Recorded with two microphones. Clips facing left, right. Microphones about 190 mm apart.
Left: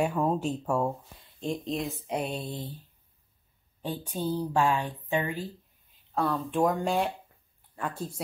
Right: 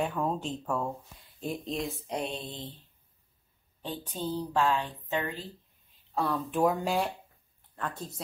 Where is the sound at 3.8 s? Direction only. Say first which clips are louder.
Left 3 dB; 10° left (ahead or behind).